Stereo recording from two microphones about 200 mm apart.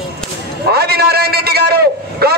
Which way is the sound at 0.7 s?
50° right (ahead or behind).